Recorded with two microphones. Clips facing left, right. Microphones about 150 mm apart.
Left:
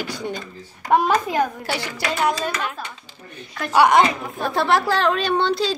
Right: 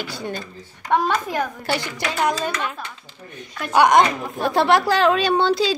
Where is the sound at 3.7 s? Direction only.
5° left (ahead or behind).